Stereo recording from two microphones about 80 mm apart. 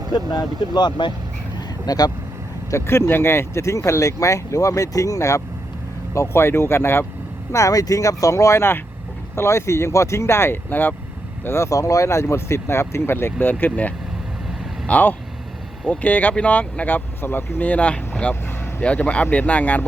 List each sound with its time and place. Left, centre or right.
0.1 s speech: left
1.5 s a sound: left
2.6 s speech: left
6.1 s speech: left
7.5 s speech: left
11.4 s speech: left; by 19.8 s centre